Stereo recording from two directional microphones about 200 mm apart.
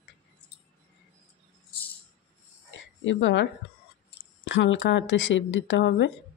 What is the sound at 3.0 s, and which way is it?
Speech, 70° left (ahead or behind).